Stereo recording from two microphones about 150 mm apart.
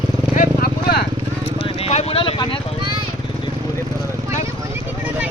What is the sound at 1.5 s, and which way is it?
Vehicle, 40° left (ahead or behind).